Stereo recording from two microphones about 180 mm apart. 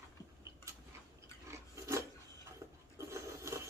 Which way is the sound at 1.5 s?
15° right (ahead or behind).